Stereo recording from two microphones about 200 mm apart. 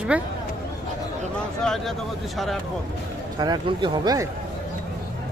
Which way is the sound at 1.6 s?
Centre (ahead or behind).